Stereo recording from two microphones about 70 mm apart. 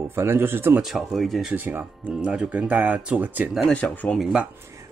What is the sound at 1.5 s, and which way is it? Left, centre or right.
Speech, right.